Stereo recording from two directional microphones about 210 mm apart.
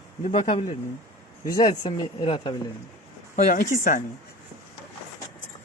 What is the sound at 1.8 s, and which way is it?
Speech, 20° left (ahead or behind).